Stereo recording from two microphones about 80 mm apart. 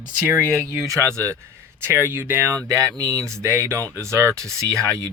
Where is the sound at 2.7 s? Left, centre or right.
Right.